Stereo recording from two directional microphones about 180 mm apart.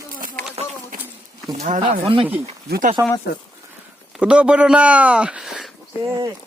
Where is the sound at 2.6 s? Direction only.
60° right (ahead or behind).